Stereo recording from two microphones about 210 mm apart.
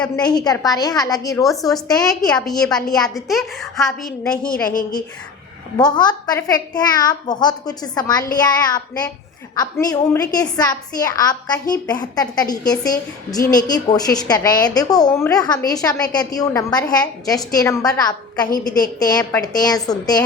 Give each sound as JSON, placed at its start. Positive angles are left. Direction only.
{"t": 0.2, "sound": "a woman's voice", "side_deg": 20}
{"t": 2.0, "sound": "a woman's voice", "side_deg": 5}
{"t": 4.7, "sound": "a woman's voice", "side_deg": 40}
{"t": 5.7, "sound": "a woman's voice", "side_deg": 20}
{"t": 18.4, "sound": "a woman's voice", "side_deg": 40}
{"t": 18.9, "sound": "a woman's voice", "side_deg": 20}